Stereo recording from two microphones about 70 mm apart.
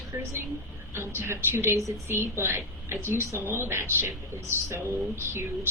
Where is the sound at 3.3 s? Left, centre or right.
Right.